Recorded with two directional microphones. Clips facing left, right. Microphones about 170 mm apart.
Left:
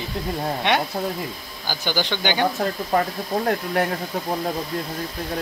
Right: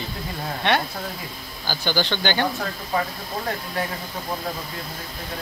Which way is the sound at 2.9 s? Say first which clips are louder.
Left 4 dB; 55° left (ahead or behind).